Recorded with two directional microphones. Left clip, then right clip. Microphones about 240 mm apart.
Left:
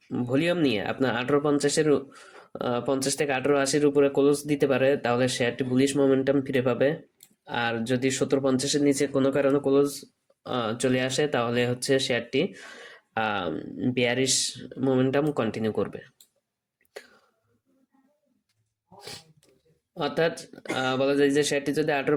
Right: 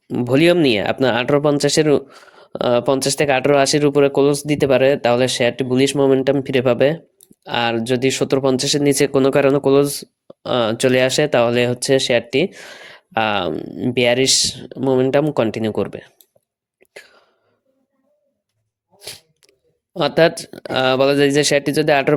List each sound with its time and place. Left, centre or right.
0.1 s speech: right
16.9 s whispering: right
18.9 s speech: right